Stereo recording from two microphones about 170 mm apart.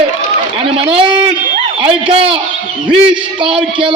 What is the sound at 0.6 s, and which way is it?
A man's voice, 30° right (ahead or behind).